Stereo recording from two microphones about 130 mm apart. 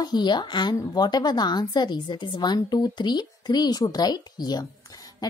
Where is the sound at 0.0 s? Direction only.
35° left (ahead or behind).